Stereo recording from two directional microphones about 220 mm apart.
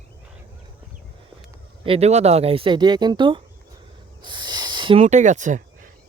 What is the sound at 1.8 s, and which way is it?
Speech, 25° right (ahead or behind).